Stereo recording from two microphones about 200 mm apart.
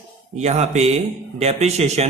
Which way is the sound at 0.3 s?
35° right (ahead or behind).